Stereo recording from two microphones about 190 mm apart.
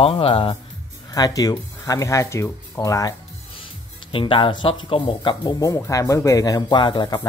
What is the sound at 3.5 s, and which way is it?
Speech, 25° left (ahead or behind).